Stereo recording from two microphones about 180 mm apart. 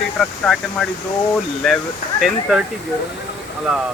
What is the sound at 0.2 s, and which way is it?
Speech, 5° left (ahead or behind).